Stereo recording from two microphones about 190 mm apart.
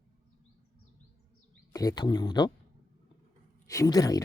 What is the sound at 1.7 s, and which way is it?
Speech, 20° left (ahead or behind).